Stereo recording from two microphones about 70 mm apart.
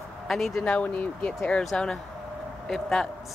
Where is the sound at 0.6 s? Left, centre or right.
Centre.